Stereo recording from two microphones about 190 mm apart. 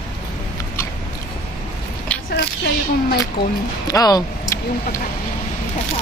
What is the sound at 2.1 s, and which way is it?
Biting, 10° left (ahead or behind).